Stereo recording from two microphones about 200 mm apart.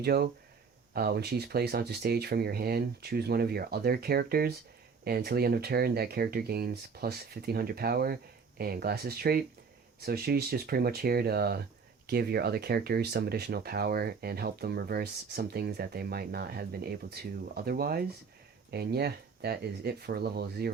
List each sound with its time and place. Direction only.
0.0 s speech: 50° right (ahead or behind)